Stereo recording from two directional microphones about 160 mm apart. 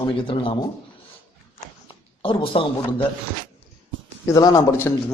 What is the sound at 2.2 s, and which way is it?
Speech, 35° left (ahead or behind).